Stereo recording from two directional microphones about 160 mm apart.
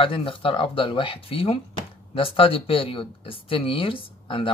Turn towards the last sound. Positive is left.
turn(degrees=35)  # may be behind; listen again after turning